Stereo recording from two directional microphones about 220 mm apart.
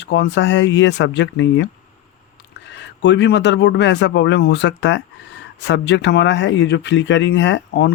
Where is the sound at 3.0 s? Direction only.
50° left (ahead or behind).